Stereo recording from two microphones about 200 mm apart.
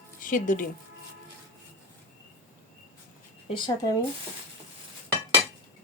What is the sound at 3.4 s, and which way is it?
Speech, 20° left (ahead or behind).